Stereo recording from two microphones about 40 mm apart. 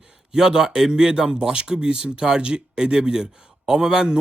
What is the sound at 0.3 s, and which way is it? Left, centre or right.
Speech, centre.